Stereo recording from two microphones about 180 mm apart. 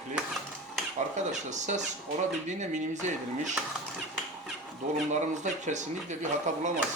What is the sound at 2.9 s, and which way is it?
Speech, 40° right (ahead or behind).